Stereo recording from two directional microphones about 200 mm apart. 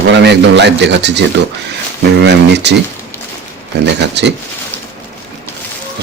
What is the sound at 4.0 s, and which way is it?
Speech, 60° right (ahead or behind).